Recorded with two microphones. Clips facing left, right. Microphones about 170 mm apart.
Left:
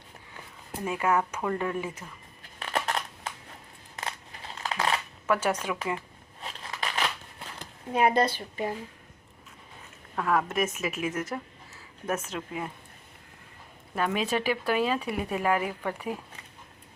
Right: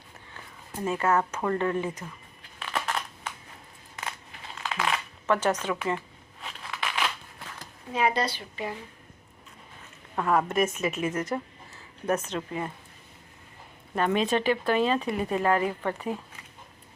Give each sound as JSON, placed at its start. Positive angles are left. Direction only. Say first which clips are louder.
{"t": 0.9, "sound": "speech", "louder": "right 1 dB", "side_deg": 10}
{"t": 2.6, "sound": "crushing", "louder": "left 1 dB", "side_deg": 40}
{"t": 4.5, "sound": "a sound", "louder": "left 1 dB", "side_deg": 35}
{"t": 5.2, "sound": "speech", "louder": "right 2 dB", "side_deg": 10}
{"t": 6.4, "sound": "a sound", "louder": "even", "side_deg": 35}
{"t": 7.9, "sound": "speech", "louder": "left 3 dB", "side_deg": 50}
{"t": 10.2, "sound": "a woman's voice", "louder": "right 2 dB", "side_deg": 0}
{"t": 13.9, "sound": "speech", "louder": "right 3 dB", "side_deg": 5}